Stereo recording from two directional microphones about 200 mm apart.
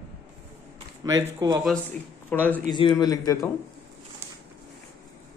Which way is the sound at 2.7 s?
25° left (ahead or behind).